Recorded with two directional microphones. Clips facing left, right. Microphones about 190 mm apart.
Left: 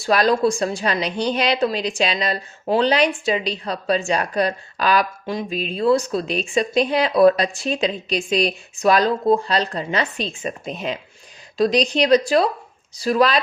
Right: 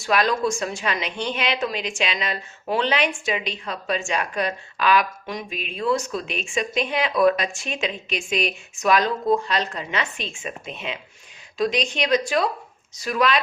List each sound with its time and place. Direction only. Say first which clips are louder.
0.0 s a woman's voice: left 4 dB; 35° left (ahead or behind)